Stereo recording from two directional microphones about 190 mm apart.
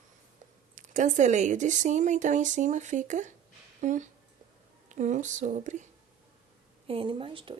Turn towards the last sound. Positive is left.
turn(degrees=-25)  # may be behind; listen again after turning